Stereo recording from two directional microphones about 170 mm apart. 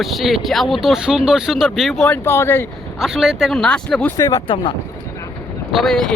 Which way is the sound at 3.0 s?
Centre (ahead or behind).